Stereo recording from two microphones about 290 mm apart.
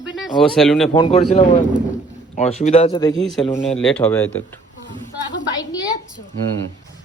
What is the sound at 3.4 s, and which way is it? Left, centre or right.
Speech, left.